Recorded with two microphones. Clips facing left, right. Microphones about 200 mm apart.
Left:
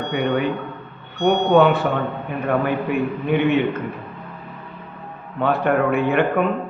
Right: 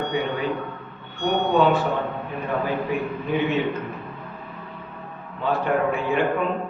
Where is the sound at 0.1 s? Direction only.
65° left (ahead or behind).